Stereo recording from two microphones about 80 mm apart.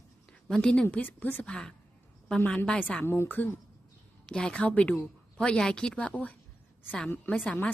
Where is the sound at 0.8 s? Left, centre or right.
Left.